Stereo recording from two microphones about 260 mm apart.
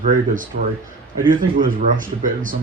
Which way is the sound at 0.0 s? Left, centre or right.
Right.